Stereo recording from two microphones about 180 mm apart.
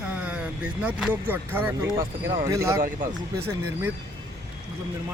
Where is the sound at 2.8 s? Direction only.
50° right (ahead or behind).